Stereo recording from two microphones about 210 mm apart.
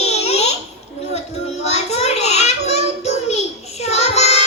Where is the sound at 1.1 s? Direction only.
30° left (ahead or behind).